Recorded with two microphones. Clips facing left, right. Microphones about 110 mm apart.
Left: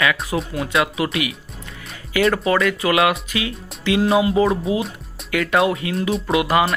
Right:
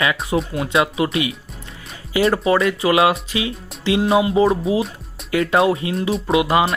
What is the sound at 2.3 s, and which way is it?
Speech, 30° right (ahead or behind).